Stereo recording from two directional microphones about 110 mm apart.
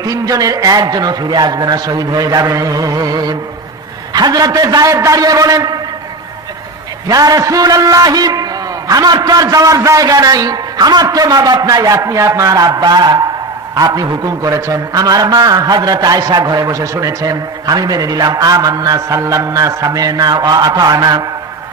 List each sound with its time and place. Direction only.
0.0 s a man's voice: 35° right (ahead or behind)
7.1 s a man's voice: 35° right (ahead or behind)